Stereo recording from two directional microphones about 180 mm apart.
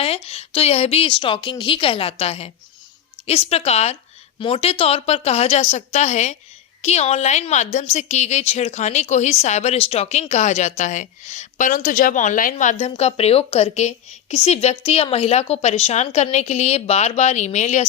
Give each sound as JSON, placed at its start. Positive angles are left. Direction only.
{"t": 0.0, "sound": "a woman's voice", "side_deg": 35}
{"t": 12.8, "sound": "a woman's voice", "side_deg": 35}